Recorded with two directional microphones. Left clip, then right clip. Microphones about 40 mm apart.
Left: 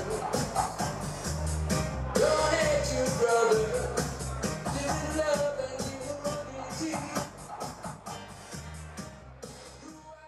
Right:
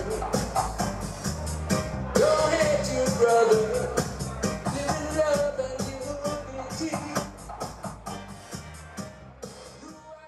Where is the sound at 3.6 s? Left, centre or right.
Right.